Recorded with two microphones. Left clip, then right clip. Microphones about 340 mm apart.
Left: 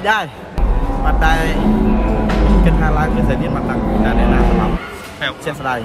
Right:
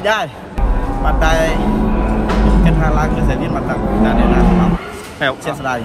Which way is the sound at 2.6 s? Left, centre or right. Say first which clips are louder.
Right 1 dB; centre.